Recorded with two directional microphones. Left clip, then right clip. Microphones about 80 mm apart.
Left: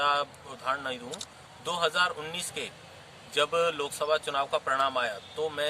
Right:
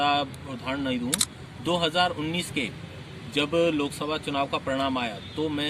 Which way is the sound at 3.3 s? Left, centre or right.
Left.